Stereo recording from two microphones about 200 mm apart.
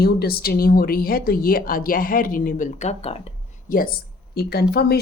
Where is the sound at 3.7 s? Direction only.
45° left (ahead or behind).